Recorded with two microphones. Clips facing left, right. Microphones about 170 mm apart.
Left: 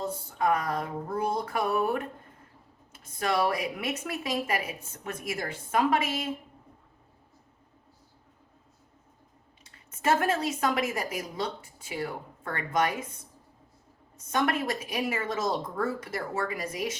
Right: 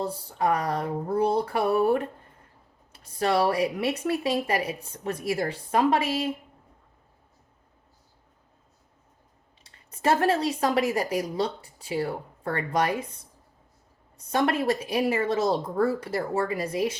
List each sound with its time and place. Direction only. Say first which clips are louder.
0.0 s a woman's voice: right 2 dB; 35° right (ahead or behind)
9.6 s a woman's voice: right 3 dB; 35° right (ahead or behind)
14.3 s a woman's voice: right 4 dB; 35° right (ahead or behind)